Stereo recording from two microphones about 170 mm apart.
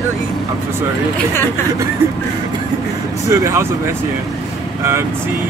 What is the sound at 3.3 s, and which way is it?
Speech, 15° right (ahead or behind).